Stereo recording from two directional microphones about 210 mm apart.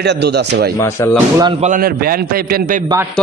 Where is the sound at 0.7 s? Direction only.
15° left (ahead or behind).